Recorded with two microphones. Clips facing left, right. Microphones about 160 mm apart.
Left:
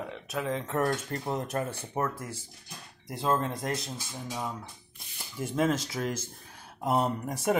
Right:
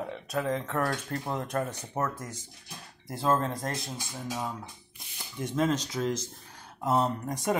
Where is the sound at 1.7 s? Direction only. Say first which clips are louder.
Even; 5° left (ahead or behind).